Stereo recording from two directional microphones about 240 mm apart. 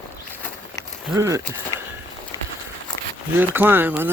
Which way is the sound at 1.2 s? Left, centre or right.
Centre.